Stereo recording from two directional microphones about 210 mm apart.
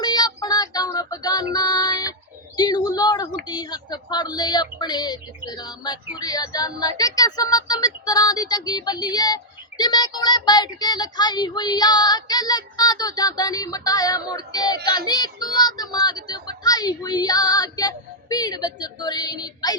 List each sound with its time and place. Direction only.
0.0 s child singing: 20° left (ahead or behind)
1.5 s music: 20° left (ahead or behind)
2.6 s speech: 20° left (ahead or behind)